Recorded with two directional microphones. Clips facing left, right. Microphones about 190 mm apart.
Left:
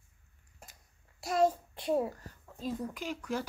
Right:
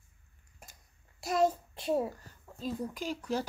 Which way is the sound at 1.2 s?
20° right (ahead or behind).